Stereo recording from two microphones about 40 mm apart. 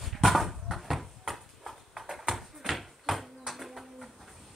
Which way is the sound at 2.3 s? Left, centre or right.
Centre.